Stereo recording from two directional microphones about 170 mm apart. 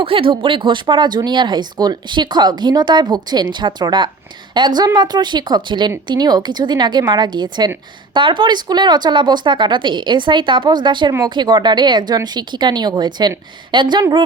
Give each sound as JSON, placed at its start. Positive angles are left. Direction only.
{"t": 0.0, "sound": "speech", "side_deg": -30}